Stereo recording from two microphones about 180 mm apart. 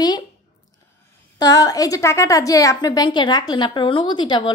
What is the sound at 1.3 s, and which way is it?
A woman's voice, 20° left (ahead or behind).